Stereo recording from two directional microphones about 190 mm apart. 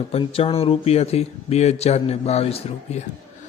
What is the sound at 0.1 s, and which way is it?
Speech, 30° left (ahead or behind).